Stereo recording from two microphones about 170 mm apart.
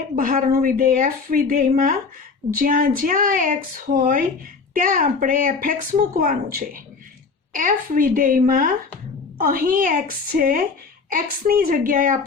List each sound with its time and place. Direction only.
0.2 s speech: 60° right (ahead or behind)